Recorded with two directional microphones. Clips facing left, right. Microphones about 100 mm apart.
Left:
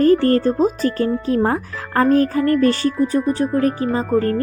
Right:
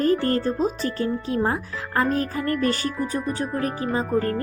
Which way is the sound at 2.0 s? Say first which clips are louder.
Left 8 dB; 40° left (ahead or behind).